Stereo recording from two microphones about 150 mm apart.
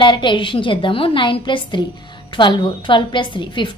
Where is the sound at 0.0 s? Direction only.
30° left (ahead or behind).